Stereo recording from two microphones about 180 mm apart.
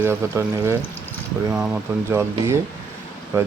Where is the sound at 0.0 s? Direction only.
15° right (ahead or behind).